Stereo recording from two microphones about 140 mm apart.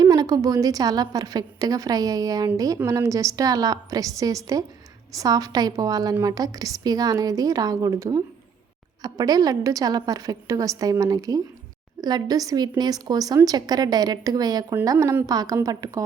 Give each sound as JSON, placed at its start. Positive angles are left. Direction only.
{"t": 0.0, "sound": "a woman's voice", "side_deg": -25}